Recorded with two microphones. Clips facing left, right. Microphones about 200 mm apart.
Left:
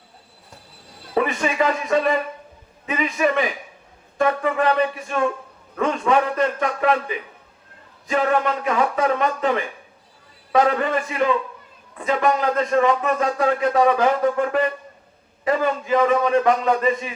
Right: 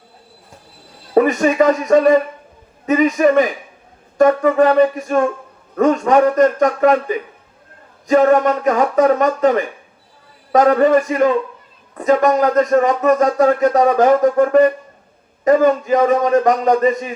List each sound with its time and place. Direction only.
1.1 s speech: 45° right (ahead or behind)